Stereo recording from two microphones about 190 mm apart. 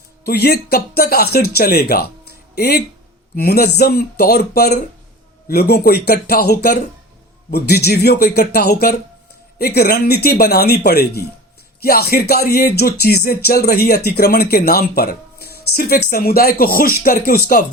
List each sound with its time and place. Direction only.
0.3 s speech: 55° left (ahead or behind)